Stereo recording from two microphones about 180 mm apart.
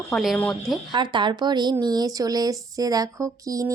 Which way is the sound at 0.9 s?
25° right (ahead or behind).